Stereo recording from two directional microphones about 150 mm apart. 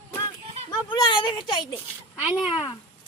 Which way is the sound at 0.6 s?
30° left (ahead or behind).